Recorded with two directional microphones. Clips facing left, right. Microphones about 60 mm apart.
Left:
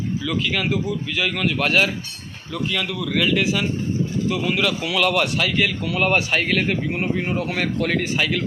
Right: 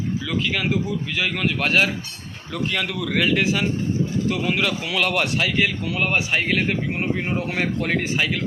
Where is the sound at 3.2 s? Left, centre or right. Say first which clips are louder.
Even; right.